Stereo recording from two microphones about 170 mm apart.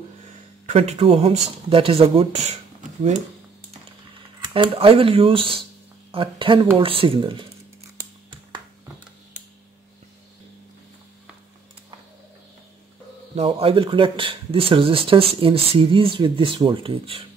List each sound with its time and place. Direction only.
0.7 s speech: 35° right (ahead or behind)
4.4 s speech: 30° right (ahead or behind)
13.4 s speech: 35° right (ahead or behind)